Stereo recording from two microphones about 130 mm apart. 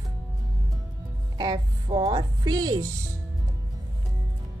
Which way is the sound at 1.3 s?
35° right (ahead or behind).